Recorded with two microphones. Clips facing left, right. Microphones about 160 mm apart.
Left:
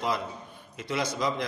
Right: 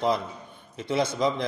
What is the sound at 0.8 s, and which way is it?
Speech, 25° right (ahead or behind).